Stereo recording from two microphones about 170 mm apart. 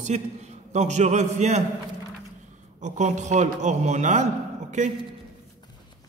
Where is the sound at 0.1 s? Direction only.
45° right (ahead or behind).